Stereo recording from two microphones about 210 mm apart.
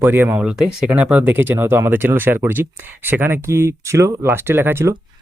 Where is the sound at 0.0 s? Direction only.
10° right (ahead or behind).